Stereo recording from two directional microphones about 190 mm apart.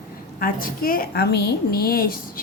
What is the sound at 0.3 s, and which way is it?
A woman's voice, 50° left (ahead or behind).